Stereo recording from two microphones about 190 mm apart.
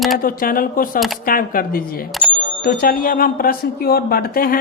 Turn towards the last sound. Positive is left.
turn(degrees=50)  # may be behind; listen again after turning